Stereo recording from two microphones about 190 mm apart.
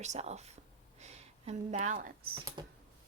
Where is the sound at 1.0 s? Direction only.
35° right (ahead or behind).